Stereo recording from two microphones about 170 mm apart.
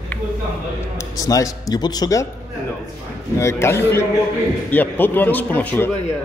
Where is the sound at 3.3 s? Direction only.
15° left (ahead or behind).